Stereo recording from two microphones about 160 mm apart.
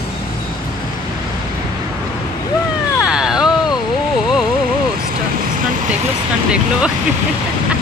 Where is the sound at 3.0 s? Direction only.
5° right (ahead or behind).